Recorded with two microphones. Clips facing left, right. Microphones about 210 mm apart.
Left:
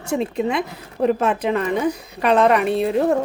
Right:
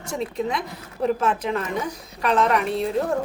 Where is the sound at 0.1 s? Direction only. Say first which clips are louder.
Left 5 dB; 65° left (ahead or behind).